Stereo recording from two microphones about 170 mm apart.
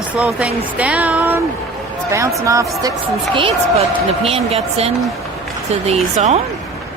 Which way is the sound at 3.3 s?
35° right (ahead or behind).